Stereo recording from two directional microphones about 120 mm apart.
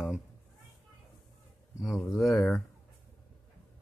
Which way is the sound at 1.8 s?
Centre (ahead or behind).